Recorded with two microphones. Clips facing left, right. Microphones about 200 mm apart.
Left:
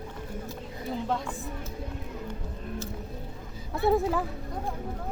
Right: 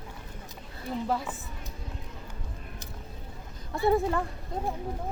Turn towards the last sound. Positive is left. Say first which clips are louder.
# even
turn(degrees=0)  # may be behind; listen again after turning